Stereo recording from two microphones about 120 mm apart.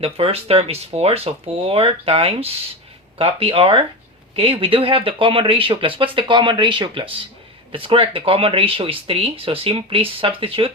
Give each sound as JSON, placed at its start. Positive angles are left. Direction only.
{"t": 0.0, "sound": "speech", "side_deg": -55}